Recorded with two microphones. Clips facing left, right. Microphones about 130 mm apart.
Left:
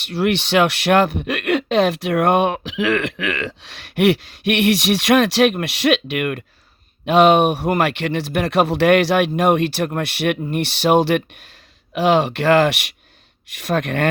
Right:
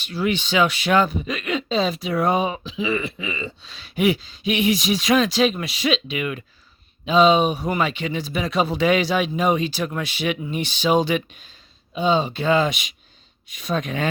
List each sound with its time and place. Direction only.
0.0 s a man's voice: 70° left (ahead or behind)
11.9 s speech: 80° left; by 14.1 s 65° left (ahead or behind)